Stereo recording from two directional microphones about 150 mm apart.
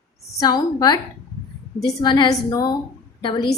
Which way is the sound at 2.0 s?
30° left (ahead or behind).